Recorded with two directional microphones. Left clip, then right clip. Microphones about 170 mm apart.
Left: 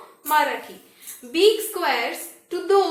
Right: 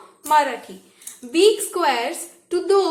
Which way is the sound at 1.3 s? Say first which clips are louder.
Right 2 dB; 30° right (ahead or behind).